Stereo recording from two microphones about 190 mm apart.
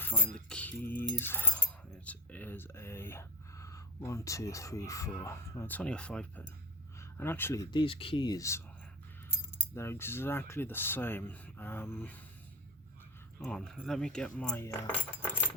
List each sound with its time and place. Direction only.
0.3 s speech: 5° left (ahead or behind)
13.4 s speech: 5° left (ahead or behind)